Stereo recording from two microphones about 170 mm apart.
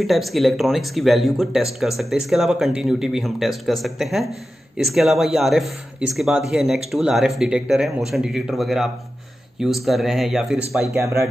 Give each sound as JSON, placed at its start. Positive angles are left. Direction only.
{"t": 0.0, "sound": "speech", "side_deg": 0}
{"t": 10.9, "sound": "speech", "side_deg": -15}